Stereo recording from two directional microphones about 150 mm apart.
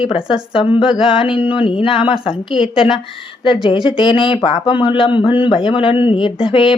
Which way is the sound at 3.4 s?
35° left (ahead or behind).